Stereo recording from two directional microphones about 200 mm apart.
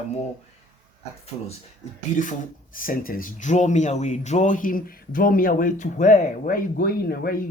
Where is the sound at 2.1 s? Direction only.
40° left (ahead or behind).